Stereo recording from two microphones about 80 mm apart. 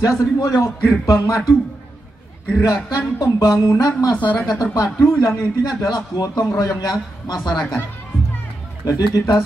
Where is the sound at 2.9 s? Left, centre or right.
Left.